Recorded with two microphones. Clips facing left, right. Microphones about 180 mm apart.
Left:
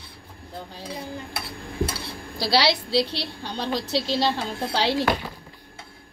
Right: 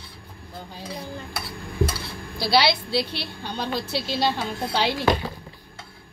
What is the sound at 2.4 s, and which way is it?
A woman's voice, 35° left (ahead or behind).